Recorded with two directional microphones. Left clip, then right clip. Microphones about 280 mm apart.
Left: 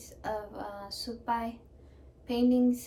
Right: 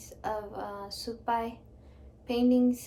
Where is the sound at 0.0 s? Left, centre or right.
Centre.